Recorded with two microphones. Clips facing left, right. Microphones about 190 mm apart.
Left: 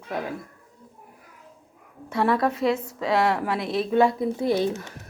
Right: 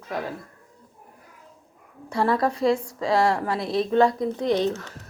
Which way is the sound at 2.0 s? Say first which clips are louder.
Even; centre (ahead or behind).